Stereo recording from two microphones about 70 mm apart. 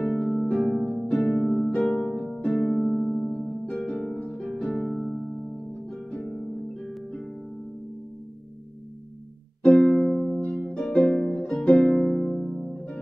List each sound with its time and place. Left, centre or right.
0.0 s harp: centre
1.7 s harp: centre
2.0 s harp: centre
9.6 s music: centre
10.9 s harp: centre